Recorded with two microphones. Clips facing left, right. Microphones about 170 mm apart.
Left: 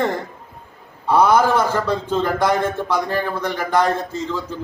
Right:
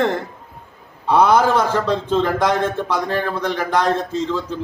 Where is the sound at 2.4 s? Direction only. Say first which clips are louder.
Even; 20° right (ahead or behind).